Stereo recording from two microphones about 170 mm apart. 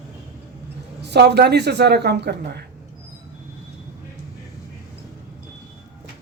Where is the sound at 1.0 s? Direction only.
80° right.